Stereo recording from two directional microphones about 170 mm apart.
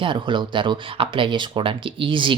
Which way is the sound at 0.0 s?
30° right (ahead or behind).